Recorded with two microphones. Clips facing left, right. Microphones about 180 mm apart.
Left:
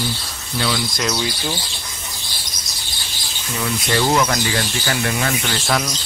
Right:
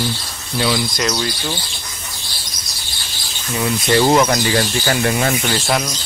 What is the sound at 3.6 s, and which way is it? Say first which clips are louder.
Speech: right 5 dB; 25° right (ahead or behind).